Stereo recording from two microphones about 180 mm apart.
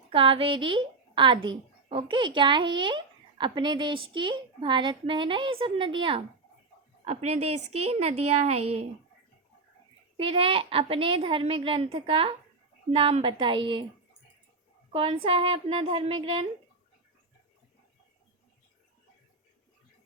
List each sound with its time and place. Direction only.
0.1 s a woman's voice: 30° right (ahead or behind)
10.2 s a woman's voice: 30° right (ahead or behind)
14.9 s speech: 30° right (ahead or behind)